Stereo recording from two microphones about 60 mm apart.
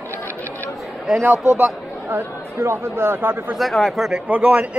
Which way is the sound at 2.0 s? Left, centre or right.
Right.